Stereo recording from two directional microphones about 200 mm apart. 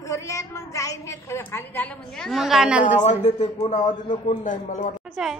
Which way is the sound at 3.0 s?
35° left (ahead or behind).